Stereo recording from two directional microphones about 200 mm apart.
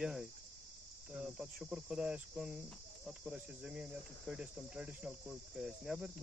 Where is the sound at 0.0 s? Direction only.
Centre (ahead or behind).